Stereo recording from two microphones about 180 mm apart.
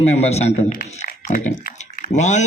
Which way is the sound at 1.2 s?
55° left (ahead or behind).